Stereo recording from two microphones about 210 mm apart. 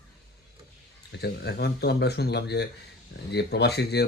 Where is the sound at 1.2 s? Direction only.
50° left (ahead or behind).